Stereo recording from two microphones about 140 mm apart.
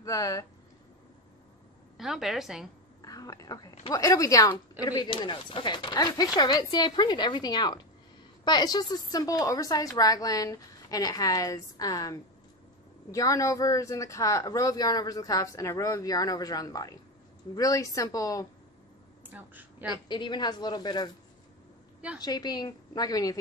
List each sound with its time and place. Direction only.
0.0 s speech: 25° left (ahead or behind)
2.0 s a woman's voice: 5° right (ahead or behind)
3.0 s a woman's voice: 25° left (ahead or behind)
19.3 s a woman's voice: 10° right (ahead or behind)
20.1 s speech: 35° left (ahead or behind)
22.2 s speech: 30° left (ahead or behind)